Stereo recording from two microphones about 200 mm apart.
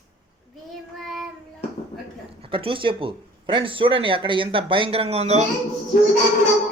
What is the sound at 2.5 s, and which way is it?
Speech, 25° right (ahead or behind).